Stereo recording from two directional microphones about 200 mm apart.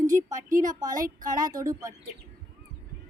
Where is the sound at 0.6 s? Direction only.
20° right (ahead or behind).